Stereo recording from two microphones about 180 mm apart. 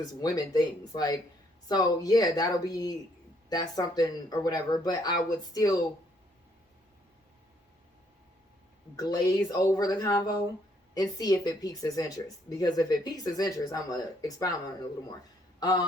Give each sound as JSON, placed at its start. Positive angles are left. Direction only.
{"t": 0.0, "sound": "speech", "side_deg": 20}
{"t": 9.0, "sound": "speech", "side_deg": 20}
{"t": 15.6, "sound": "speech", "side_deg": 20}